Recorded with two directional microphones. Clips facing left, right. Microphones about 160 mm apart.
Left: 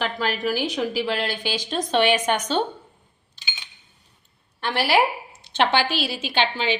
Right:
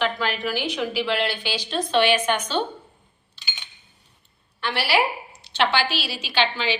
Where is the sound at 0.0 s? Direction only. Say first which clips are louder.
Even; 40° left (ahead or behind).